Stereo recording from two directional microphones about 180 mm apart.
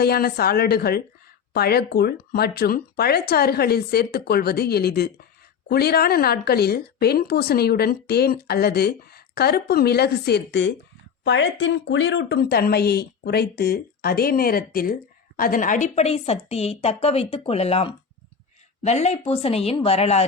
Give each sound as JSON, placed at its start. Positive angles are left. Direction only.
{"t": 0.0, "sound": "a woman's voice", "side_deg": 60}
{"t": 11.2, "sound": "a woman's voice", "side_deg": 90}